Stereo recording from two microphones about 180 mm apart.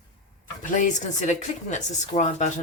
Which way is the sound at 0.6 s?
45° left (ahead or behind).